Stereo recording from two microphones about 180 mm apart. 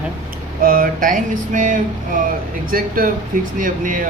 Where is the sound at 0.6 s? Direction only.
50° right (ahead or behind).